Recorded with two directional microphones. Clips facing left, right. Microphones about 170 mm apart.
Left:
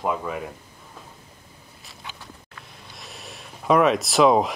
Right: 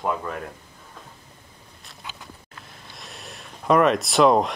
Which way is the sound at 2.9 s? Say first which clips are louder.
Even; centre (ahead or behind).